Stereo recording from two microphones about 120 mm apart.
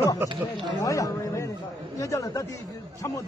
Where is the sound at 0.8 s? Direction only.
25° left (ahead or behind).